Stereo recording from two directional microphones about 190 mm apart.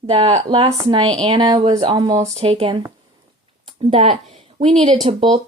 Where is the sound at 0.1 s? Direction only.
30° right (ahead or behind).